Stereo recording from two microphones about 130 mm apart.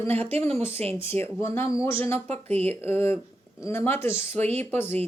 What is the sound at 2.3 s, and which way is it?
Speech, 55° right (ahead or behind).